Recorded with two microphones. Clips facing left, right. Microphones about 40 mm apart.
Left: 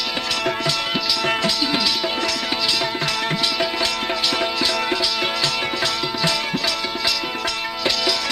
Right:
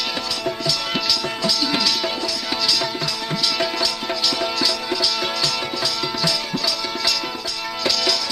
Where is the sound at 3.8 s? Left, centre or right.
Left.